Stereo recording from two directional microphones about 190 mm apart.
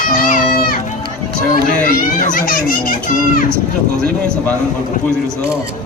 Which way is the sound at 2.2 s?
45° left (ahead or behind).